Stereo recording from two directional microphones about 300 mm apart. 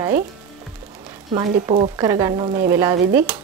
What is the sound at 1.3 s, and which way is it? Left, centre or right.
Speech, right.